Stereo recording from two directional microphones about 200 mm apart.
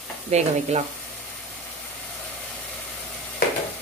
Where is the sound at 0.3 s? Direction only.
35° right (ahead or behind).